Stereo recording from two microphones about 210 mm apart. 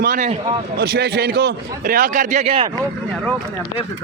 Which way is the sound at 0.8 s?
50° right (ahead or behind).